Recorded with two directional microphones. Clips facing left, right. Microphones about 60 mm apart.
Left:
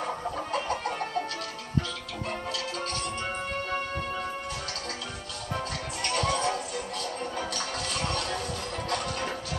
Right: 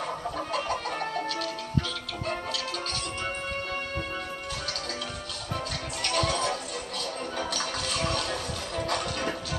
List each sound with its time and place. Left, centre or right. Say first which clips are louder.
0.0 s chicken: even; left
6.0 s music: even; left
8.1 s a sound: even; left